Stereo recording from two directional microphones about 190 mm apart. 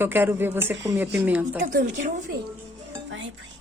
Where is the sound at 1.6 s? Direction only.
40° right (ahead or behind).